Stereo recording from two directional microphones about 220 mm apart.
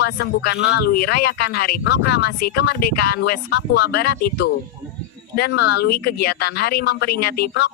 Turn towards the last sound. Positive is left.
turn(degrees=45)  # may be behind; listen again after turning